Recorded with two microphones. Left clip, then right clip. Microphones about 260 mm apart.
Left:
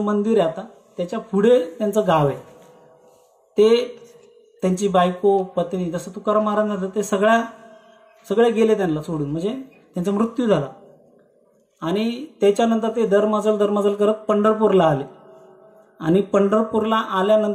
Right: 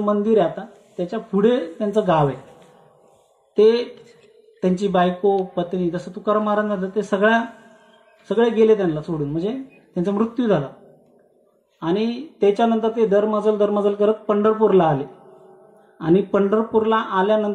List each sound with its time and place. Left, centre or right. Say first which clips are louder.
0.0 s speech: right 1 dB; left
3.5 s speech: even; left
11.8 s speech: right 1 dB; left